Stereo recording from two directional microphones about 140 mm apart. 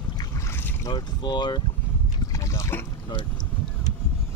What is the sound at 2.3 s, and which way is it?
Boat, 20° left (ahead or behind).